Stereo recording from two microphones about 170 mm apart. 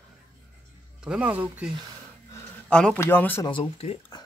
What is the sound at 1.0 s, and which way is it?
Speech, 5° right (ahead or behind).